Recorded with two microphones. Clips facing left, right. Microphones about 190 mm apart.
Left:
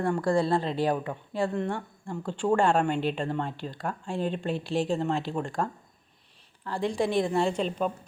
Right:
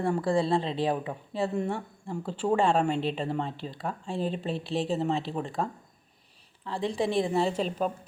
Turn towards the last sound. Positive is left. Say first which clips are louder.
# left 1 dB
turn(degrees=-5)  # may be behind; listen again after turning